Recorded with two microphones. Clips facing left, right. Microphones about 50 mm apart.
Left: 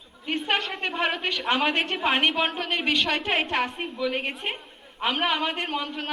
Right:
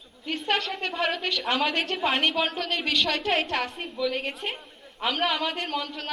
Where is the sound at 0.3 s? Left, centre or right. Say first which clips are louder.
Left 1 dB; centre.